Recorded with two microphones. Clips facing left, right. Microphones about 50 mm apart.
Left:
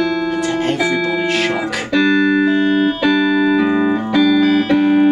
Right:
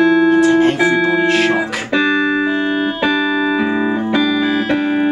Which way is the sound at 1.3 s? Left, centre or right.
Centre.